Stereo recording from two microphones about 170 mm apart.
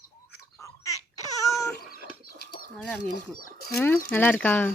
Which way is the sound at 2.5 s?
55° left (ahead or behind).